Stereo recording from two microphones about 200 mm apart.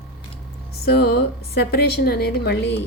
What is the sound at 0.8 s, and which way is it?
A woman's voice, 50° left (ahead or behind).